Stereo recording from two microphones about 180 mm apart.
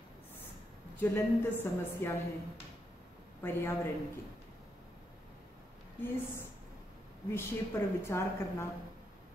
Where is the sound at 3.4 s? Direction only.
15° left (ahead or behind).